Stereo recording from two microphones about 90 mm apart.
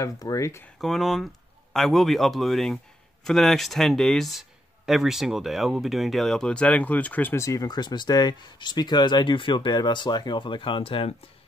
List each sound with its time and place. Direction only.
0.0 s speech: 40° left (ahead or behind)
0.7 s speech: centre (ahead or behind); by 7.3 s 15° left (ahead or behind)
7.3 s speech: 40° left (ahead or behind); by 11.1 s 90° left